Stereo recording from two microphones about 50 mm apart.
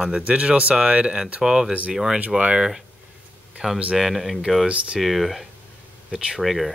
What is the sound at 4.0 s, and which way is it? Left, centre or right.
Speech, centre.